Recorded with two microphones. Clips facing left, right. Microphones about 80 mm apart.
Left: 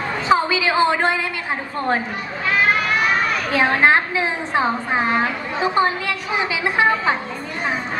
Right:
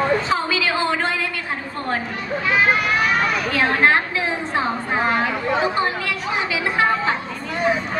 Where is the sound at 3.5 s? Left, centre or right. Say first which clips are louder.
Left 2 dB; left.